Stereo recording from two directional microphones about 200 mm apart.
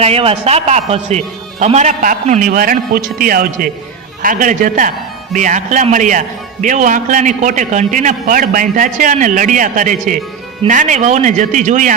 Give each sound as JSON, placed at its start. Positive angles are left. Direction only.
{"t": 0.0, "sound": "a man's voice", "side_deg": -30}